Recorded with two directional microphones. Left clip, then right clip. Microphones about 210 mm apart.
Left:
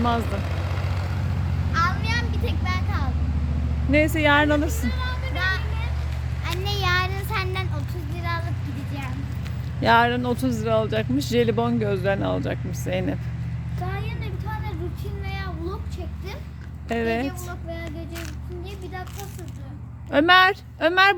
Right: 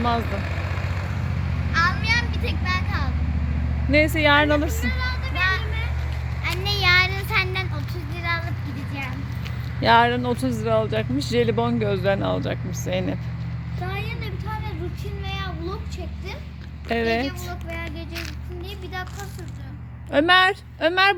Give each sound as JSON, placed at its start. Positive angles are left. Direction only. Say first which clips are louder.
{"t": 0.0, "sound": "vehicle", "louder": "right 1 dB", "side_deg": 5}
{"t": 3.9, "sound": "a woman's voice", "louder": "right 1 dB", "side_deg": 5}
{"t": 5.4, "sound": "vehicle", "louder": "right 3 dB", "side_deg": -20}
{"t": 6.4, "sound": "a sound", "louder": "right 4 dB", "side_deg": -15}
{"t": 9.8, "sound": "speech", "louder": "right 1 dB", "side_deg": 0}
{"t": 16.9, "sound": "speech", "louder": "right 2 dB", "side_deg": -5}
{"t": 20.1, "sound": "speech", "louder": "left 1 dB", "side_deg": 0}